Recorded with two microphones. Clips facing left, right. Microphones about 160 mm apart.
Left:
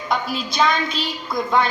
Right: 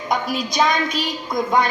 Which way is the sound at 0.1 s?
45° right (ahead or behind).